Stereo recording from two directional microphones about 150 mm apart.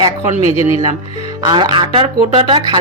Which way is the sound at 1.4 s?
30° right (ahead or behind).